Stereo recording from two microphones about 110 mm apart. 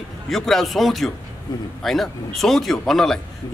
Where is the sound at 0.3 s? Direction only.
Centre (ahead or behind).